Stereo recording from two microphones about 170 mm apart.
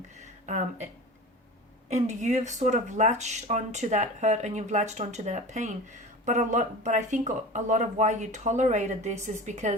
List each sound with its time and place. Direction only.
0.4 s speech: 45° right (ahead or behind)
1.9 s speech: 45° right (ahead or behind)